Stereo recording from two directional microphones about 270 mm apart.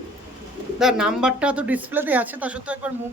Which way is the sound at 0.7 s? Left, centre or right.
Centre.